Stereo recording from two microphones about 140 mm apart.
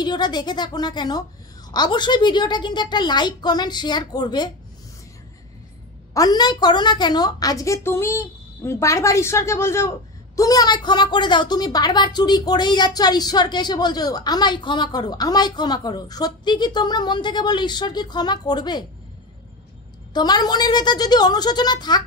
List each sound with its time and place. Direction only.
0.0 s a woman's voice: 30° left (ahead or behind)
6.1 s a woman's voice: 30° left (ahead or behind)
20.1 s a woman's voice: 30° left (ahead or behind)